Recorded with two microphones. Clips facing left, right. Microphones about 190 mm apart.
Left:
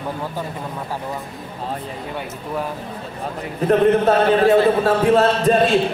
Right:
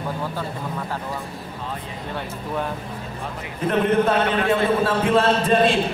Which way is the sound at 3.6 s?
40° left (ahead or behind).